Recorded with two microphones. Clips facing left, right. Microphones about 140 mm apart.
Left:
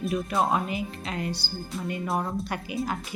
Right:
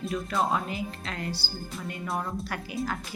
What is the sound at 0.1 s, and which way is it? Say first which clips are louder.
A woman's voice: left 2 dB; 20° left (ahead or behind).